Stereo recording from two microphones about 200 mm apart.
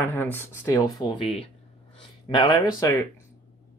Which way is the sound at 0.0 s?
10° left (ahead or behind).